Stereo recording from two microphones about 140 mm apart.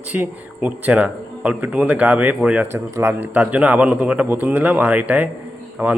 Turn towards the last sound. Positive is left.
turn(degrees=-15)  # may be behind; listen again after turning